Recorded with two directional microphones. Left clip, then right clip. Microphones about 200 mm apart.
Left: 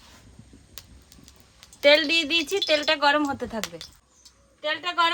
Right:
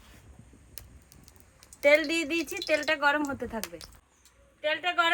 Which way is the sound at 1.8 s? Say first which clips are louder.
Left 5 dB; 70° left (ahead or behind).